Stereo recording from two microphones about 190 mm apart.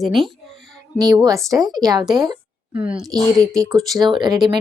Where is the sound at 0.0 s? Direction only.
Centre (ahead or behind).